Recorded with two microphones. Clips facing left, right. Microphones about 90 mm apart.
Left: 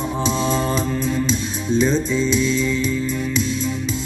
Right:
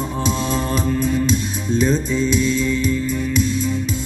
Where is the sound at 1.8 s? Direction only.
10° right (ahead or behind).